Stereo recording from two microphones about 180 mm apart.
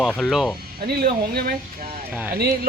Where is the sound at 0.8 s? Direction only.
60° right (ahead or behind).